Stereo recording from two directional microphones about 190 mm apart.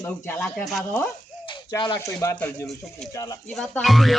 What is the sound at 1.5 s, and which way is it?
Speech, 25° left (ahead or behind).